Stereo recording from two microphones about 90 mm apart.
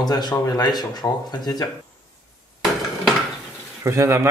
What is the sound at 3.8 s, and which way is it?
Speech, 30° right (ahead or behind).